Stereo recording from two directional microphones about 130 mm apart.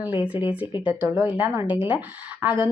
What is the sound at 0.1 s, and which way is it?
Speech, 40° left (ahead or behind).